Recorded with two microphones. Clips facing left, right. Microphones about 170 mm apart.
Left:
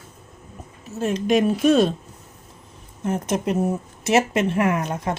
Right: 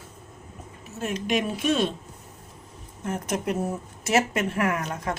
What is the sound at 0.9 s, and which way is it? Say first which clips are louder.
Speech: left 7 dB; 30° left (ahead or behind).